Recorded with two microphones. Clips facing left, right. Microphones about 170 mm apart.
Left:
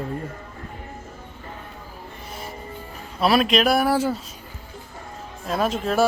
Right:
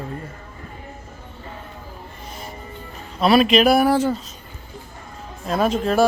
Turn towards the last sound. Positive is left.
turn(degrees=0)  # may be behind; listen again after turning